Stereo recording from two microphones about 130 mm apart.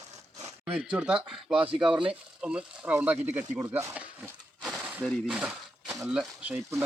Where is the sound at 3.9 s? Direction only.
10° right (ahead or behind).